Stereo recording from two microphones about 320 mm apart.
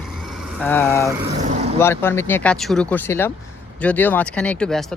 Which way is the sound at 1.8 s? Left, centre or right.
Centre.